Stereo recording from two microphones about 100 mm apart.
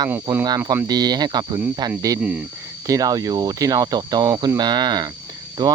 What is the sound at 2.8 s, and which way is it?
Speech, 35° right (ahead or behind).